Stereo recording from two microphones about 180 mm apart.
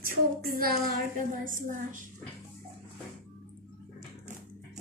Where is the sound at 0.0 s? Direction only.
55° right (ahead or behind).